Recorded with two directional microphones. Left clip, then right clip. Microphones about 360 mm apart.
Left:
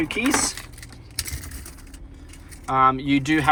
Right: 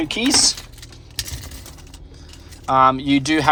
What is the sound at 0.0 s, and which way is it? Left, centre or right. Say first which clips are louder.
Speech: right 5 dB; centre.